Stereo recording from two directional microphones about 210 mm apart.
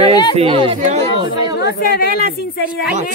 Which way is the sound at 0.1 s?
20° left (ahead or behind).